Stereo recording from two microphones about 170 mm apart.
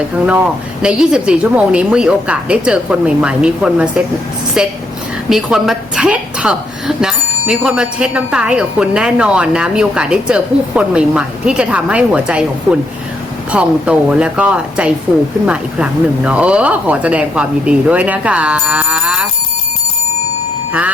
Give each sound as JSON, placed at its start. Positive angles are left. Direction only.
{"t": 0.8, "sound": "a woman's voice", "side_deg": -5}
{"t": 13.5, "sound": "speech", "side_deg": -5}